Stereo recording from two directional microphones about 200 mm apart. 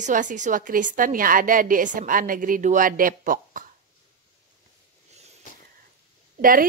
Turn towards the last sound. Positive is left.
turn(degrees=-45)  # may be behind; listen again after turning